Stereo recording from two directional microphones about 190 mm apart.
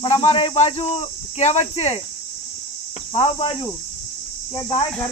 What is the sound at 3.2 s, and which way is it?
Speech, 30° left (ahead or behind).